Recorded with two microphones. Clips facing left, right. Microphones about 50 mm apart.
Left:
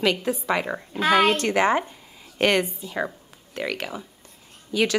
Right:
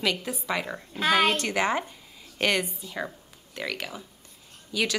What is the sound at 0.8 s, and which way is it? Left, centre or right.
Speech, centre.